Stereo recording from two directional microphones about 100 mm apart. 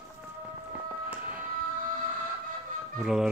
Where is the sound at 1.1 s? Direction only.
15° right (ahead or behind).